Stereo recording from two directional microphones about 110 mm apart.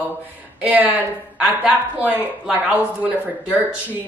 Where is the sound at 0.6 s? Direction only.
15° right (ahead or behind).